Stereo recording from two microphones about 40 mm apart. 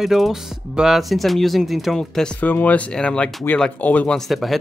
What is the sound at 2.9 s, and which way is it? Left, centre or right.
Speech, left.